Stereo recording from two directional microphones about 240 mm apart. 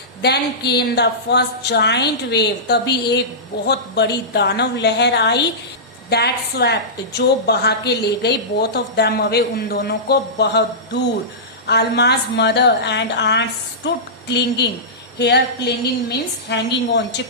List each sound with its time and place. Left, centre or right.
0.2 s a woman's voice: left
11.6 s a woman's voice: left